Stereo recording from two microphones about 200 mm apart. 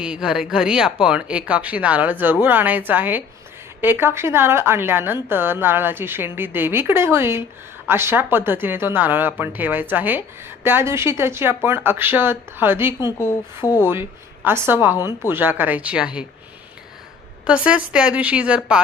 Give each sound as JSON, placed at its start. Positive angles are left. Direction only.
{"t": 0.0, "sound": "speech", "side_deg": -5}
{"t": 13.0, "sound": "speech", "side_deg": 20}
{"t": 13.7, "sound": "speech", "side_deg": -10}
{"t": 17.4, "sound": "speech", "side_deg": -5}